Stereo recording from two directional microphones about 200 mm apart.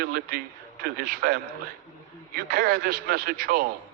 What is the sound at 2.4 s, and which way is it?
A man's voice, 50° right (ahead or behind).